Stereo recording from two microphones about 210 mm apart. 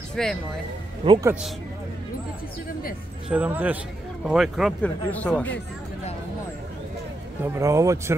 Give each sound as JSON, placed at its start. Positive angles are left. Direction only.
{"t": 0.1, "sound": "speech", "side_deg": 0}
{"t": 1.0, "sound": "speech", "side_deg": -20}
{"t": 3.3, "sound": "a man's voice", "side_deg": -5}
{"t": 7.4, "sound": "a man's voice", "side_deg": -15}